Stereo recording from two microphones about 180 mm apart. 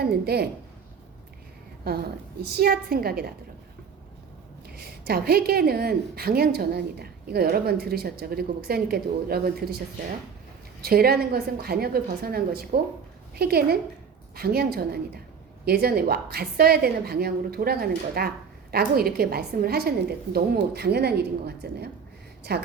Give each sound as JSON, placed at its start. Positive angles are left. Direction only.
{"t": 0.0, "sound": "a woman's voice", "side_deg": -60}
{"t": 1.9, "sound": "a woman's voice", "side_deg": -60}
{"t": 4.7, "sound": "a woman's voice", "side_deg": -60}
{"t": 10.8, "sound": "a woman's voice", "side_deg": -60}